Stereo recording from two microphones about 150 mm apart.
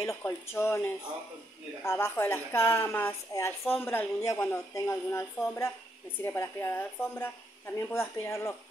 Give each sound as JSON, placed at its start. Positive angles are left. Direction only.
{"t": 0.0, "sound": "a woman's voice", "side_deg": 20}